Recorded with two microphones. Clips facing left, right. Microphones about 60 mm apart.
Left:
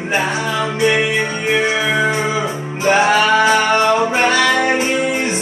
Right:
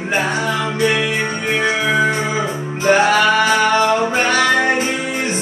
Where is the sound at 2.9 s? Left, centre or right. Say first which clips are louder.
Even; left.